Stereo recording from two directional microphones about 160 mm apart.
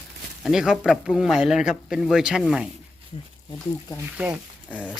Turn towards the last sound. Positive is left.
turn(degrees=-10)  # may be behind; listen again after turning